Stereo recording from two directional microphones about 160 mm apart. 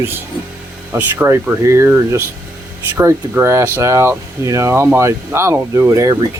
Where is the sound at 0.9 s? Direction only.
15° right (ahead or behind).